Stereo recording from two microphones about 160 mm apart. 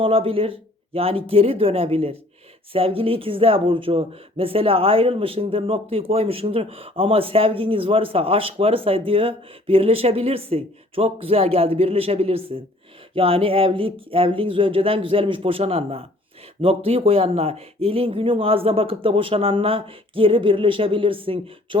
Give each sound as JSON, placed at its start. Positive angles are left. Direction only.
{"t": 0.0, "sound": "speech", "side_deg": -35}